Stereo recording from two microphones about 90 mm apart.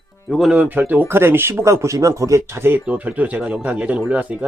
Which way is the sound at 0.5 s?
15° right (ahead or behind).